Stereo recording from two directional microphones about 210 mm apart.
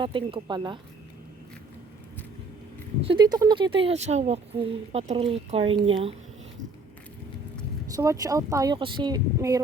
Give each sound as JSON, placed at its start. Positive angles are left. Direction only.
{"t": 0.0, "sound": "speech", "side_deg": -25}
{"t": 3.1, "sound": "speech", "side_deg": -20}
{"t": 7.9, "sound": "speech", "side_deg": -15}